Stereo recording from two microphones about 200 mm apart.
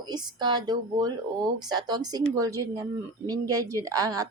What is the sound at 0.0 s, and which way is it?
A woman's voice, 20° right (ahead or behind).